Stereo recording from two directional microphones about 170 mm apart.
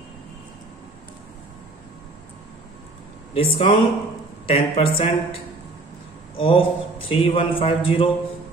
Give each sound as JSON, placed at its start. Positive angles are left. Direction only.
{"t": 3.3, "sound": "a man's voice", "side_deg": 30}